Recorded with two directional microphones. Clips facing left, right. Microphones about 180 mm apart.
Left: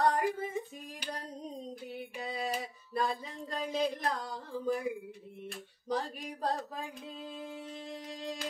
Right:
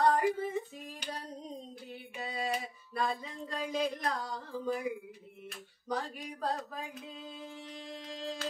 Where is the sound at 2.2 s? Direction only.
30° left (ahead or behind).